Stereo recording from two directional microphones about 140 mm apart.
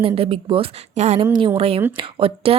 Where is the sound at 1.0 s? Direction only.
50° right (ahead or behind).